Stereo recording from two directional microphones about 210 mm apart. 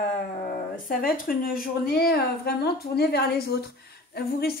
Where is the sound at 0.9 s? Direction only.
40° left (ahead or behind).